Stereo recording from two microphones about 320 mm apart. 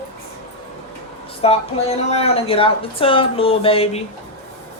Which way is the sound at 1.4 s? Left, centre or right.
Centre.